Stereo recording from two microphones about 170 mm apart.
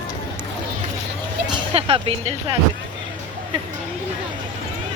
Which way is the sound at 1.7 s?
35° right (ahead or behind).